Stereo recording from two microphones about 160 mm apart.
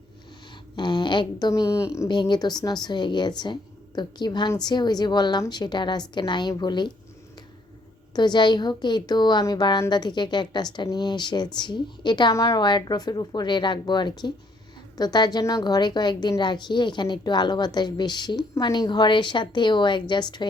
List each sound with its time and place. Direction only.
0.8 s a woman's voice: 30° left (ahead or behind)
8.1 s a woman's voice: 25° left (ahead or behind)